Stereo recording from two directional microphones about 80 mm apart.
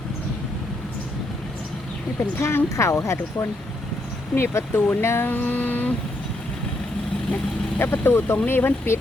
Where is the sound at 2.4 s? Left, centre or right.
Left.